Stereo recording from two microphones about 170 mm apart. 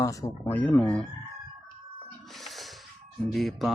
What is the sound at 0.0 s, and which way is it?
Speech, 20° left (ahead or behind).